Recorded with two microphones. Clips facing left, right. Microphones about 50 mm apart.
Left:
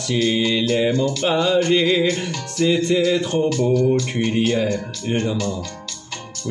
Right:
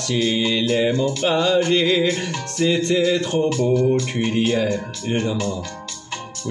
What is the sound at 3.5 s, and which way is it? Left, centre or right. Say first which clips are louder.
Music: left 1 dB; right.